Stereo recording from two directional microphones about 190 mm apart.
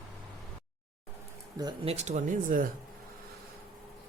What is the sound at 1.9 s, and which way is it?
Speech, 35° right (ahead or behind).